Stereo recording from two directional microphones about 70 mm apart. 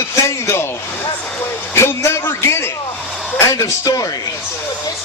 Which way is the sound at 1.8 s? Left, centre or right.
Left.